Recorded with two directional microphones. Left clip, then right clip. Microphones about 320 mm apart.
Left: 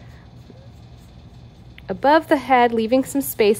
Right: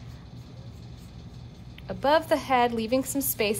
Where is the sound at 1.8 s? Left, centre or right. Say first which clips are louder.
Left 7 dB; left.